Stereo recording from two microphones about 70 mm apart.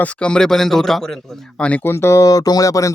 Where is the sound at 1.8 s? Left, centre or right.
Left.